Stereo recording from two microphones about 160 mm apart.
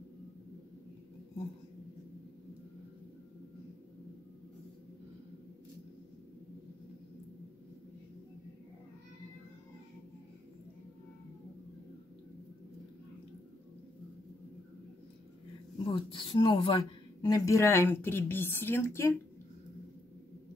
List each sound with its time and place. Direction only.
15.8 s a woman's voice: 30° left (ahead or behind); by 19.1 s 15° left (ahead or behind)